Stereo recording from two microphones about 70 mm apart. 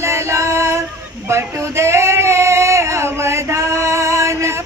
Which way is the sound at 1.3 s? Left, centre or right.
Right.